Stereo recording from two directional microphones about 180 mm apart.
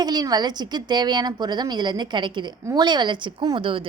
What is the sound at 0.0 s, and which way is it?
A woman's voice, 20° right (ahead or behind).